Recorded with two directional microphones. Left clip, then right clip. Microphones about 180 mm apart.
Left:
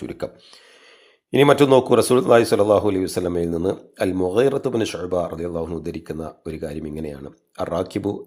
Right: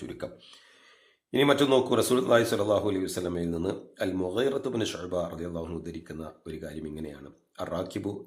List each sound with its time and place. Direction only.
0.0 s a man's voice: 30° left (ahead or behind)
1.3 s a man's voice: 35° left (ahead or behind)